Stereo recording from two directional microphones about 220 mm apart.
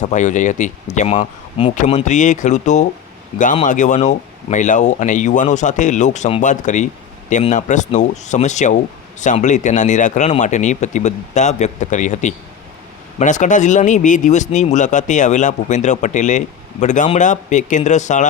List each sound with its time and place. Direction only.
0.1 s speech: 35° left (ahead or behind)